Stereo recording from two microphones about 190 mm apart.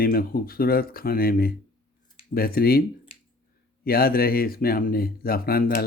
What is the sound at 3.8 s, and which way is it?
Speech, 50° left (ahead or behind).